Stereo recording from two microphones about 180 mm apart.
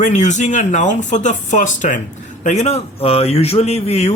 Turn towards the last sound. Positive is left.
turn(degrees=35)  # may be behind; listen again after turning